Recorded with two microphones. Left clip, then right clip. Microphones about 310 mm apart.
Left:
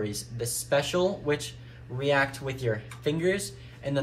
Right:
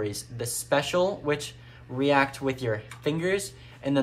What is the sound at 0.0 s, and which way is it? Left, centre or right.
Speech, centre.